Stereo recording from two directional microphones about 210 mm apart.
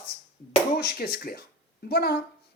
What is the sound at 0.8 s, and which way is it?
Speech, 45° left (ahead or behind).